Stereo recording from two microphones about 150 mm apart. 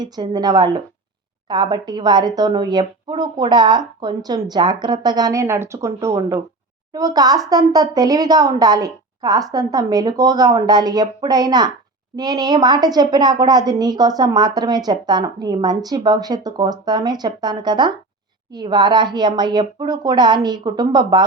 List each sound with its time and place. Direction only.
0.0 s speech: 25° right (ahead or behind)